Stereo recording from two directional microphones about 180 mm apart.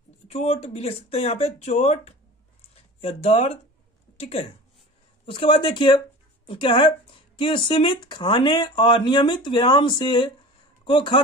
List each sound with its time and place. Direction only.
0.3 s speech: 35° left (ahead or behind)